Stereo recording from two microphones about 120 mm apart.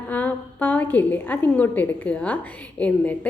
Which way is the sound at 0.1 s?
15° left (ahead or behind).